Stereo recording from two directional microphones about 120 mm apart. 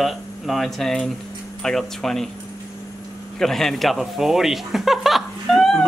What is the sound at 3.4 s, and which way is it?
Speech, centre (ahead or behind).